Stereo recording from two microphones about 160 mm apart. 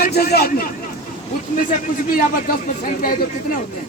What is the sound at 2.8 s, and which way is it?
Speech, 60° left (ahead or behind).